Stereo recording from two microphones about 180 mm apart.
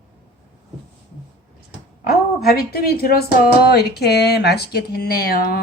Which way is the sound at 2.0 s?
55° left (ahead or behind).